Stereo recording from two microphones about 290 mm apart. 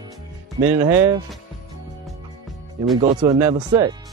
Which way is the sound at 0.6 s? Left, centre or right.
Centre.